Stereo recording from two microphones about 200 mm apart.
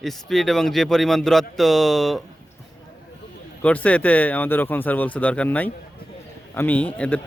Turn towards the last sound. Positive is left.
turn(degrees=5)  # may be behind; listen again after turning